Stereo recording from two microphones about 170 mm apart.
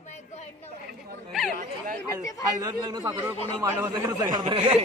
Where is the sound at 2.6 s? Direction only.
25° right (ahead or behind).